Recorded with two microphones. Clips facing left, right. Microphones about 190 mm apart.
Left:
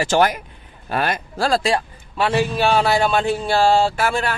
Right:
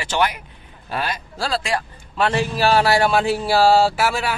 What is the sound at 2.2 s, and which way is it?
Speech, centre (ahead or behind).